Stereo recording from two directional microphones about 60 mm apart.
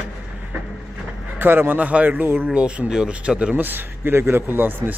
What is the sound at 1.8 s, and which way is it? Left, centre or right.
Speech, right.